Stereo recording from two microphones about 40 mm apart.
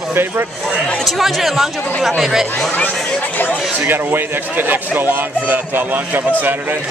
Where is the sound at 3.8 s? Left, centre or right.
Right.